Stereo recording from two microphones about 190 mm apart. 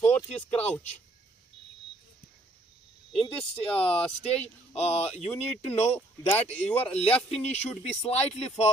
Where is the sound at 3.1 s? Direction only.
Centre (ahead or behind).